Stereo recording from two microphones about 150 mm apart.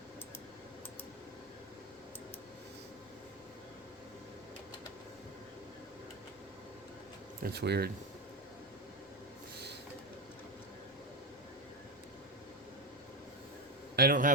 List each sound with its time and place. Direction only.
7.4 s speech: 90° right
13.9 s a man's voice: 80° right